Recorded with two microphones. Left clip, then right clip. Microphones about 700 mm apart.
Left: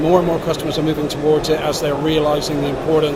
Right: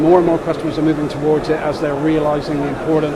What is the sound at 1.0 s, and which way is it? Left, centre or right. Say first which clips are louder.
Speech: even; right.